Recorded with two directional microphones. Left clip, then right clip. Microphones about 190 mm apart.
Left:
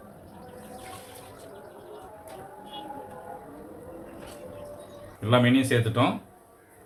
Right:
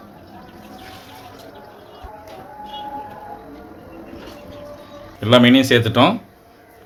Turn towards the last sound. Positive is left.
turn(degrees=-50)  # may be behind; listen again after turning